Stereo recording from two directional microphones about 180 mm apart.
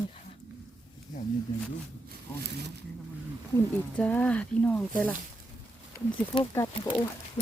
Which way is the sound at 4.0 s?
5° left (ahead or behind).